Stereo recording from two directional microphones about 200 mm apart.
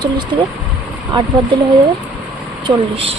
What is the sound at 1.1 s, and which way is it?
Speech, 25° right (ahead or behind).